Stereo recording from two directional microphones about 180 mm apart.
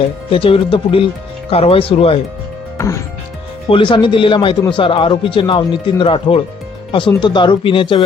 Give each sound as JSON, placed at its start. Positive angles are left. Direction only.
{"t": 0.3, "sound": "speech", "side_deg": 30}
{"t": 3.7, "sound": "speech", "side_deg": 30}